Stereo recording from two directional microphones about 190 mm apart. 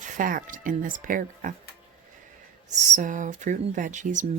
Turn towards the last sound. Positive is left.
turn(degrees=-40)  # may be behind; listen again after turning